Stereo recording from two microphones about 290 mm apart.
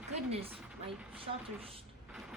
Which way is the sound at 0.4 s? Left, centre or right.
Centre.